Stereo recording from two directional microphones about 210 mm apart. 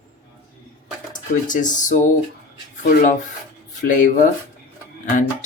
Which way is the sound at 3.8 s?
40° left (ahead or behind).